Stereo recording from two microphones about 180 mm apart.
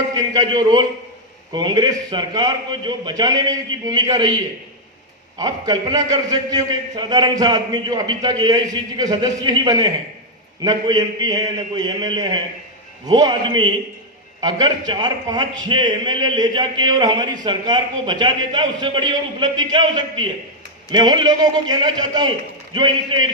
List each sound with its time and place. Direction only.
0.2 s a man's voice: 25° right (ahead or behind)
5.4 s a man's voice: 20° right (ahead or behind)